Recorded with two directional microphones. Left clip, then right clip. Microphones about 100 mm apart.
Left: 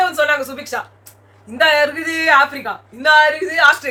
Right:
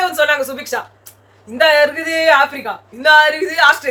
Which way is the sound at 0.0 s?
20° right (ahead or behind).